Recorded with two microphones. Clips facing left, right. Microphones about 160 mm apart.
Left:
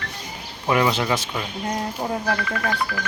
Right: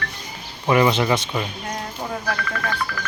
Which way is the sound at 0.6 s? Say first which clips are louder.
Right 3 dB; centre (ahead or behind).